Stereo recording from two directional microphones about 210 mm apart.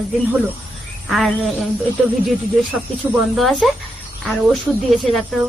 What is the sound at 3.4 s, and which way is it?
A woman's voice, centre (ahead or behind).